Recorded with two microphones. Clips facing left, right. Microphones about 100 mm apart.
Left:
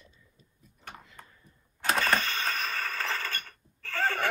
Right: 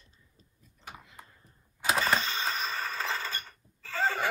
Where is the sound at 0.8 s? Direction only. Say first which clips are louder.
Even; 5° right (ahead or behind).